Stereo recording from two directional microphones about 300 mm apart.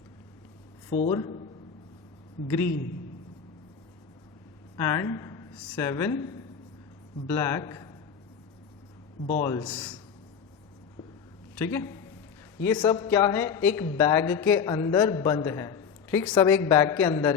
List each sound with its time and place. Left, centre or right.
0.9 s a man's voice: centre
4.8 s speech: centre
9.3 s speech: centre
11.5 s a man's voice: centre